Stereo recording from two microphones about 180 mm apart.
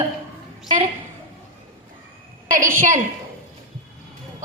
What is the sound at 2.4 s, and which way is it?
Speech, 45° right (ahead or behind).